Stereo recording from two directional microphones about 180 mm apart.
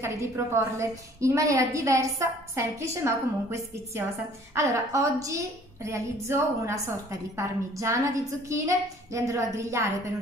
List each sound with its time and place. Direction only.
0.0 s a woman's voice: 15° right (ahead or behind)